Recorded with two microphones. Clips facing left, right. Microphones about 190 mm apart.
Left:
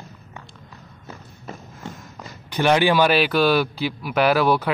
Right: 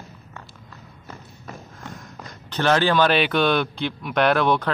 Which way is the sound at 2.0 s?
10° left (ahead or behind).